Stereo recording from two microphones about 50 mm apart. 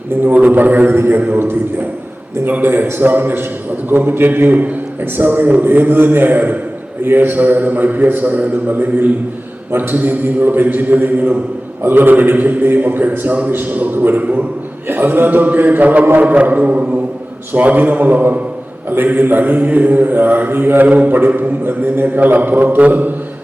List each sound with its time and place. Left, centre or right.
0.3 s mantra: right
2.5 s a man's voice: right
3.8 s mantra: right
13.5 s mantra: right
14.8 s mantra: right
16.2 s a sound: right
17.5 s mantra: right